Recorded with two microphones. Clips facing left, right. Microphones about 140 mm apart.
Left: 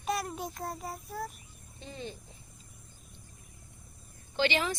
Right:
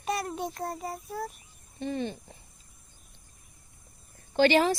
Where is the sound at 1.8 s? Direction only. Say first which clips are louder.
Right 10 dB; 60° right (ahead or behind).